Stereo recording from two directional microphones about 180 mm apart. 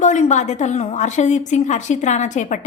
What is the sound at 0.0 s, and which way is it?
A woman's voice, 40° left (ahead or behind).